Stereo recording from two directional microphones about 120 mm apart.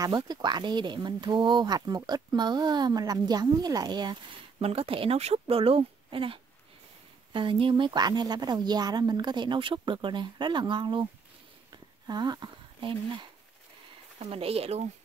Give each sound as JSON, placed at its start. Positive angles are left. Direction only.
{"t": 0.0, "sound": "speech", "side_deg": -35}
{"t": 4.6, "sound": "speech", "side_deg": -55}
{"t": 12.1, "sound": "speech", "side_deg": -35}
{"t": 14.2, "sound": "speech", "side_deg": -55}